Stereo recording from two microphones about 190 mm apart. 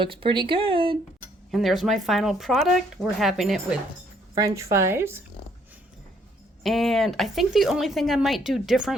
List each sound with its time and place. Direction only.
0.0 s speech: 25° right (ahead or behind)
1.5 s speech: centre (ahead or behind)
4.4 s speech: 15° right (ahead or behind)
6.6 s speech: centre (ahead or behind)